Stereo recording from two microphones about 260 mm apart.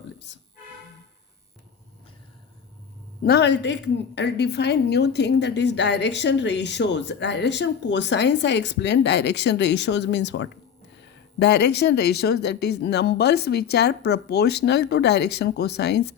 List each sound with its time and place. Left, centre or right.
3.2 s a woman's voice: left